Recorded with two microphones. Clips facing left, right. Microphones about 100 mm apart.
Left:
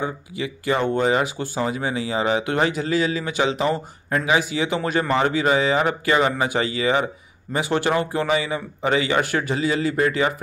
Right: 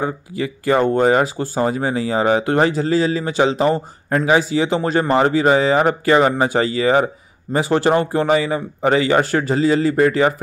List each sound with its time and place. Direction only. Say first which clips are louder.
0.0 s speech: right 5 dB; 45° right (ahead or behind)